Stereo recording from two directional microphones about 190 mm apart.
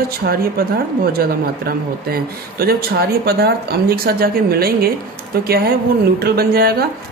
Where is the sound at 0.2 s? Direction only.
50° right (ahead or behind).